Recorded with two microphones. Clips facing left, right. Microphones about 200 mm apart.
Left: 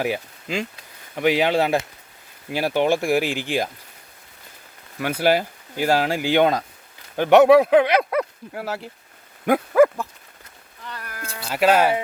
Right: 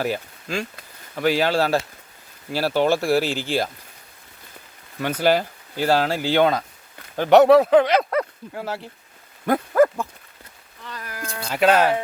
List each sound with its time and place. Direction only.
0.0 s speech: 15° left (ahead or behind)
4.9 s speech: 10° left (ahead or behind)
9.5 s dog: 10° left (ahead or behind)
11.3 s speech: 5° left (ahead or behind)